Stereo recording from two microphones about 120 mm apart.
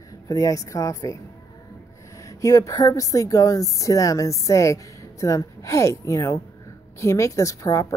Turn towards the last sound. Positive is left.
turn(degrees=25)  # may be behind; listen again after turning